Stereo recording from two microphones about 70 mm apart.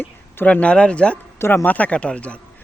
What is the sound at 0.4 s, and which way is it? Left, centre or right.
Speech, centre.